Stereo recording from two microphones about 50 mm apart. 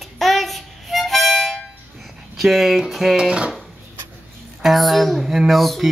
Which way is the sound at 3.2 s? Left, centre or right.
Centre.